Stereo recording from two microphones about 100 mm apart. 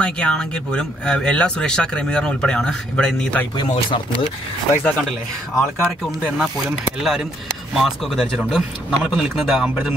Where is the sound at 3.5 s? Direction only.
55° left (ahead or behind).